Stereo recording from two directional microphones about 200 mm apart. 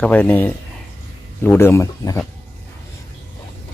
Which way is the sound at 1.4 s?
10° left (ahead or behind).